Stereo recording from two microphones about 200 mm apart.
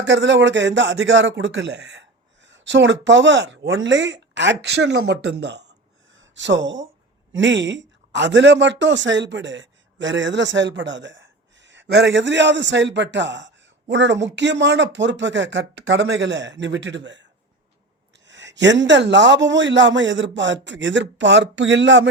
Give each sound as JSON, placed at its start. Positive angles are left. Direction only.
{"t": 0.1, "sound": "a man's voice", "side_deg": -65}
{"t": 18.3, "sound": "speech", "side_deg": -65}